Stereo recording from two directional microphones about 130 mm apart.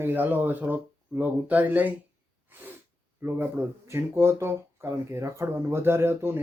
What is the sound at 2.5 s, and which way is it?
Sneeze, 15° right (ahead or behind).